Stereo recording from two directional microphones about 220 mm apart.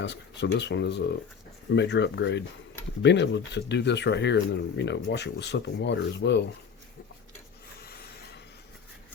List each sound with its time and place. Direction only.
0.0 s speech: 55° left (ahead or behind)
7.8 s printer: 45° left (ahead or behind)